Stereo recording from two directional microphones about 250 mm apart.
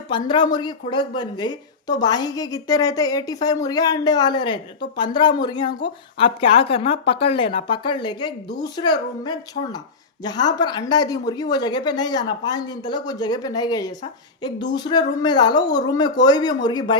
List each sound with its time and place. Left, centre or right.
0.1 s a woman's voice: centre